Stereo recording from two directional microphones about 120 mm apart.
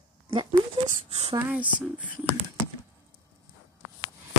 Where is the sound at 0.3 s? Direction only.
45° right (ahead or behind).